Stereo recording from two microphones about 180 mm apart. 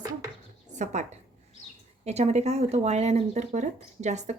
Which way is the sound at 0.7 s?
40° right (ahead or behind).